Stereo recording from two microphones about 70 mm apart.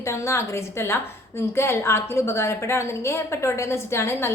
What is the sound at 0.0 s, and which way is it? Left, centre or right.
A woman's voice, left.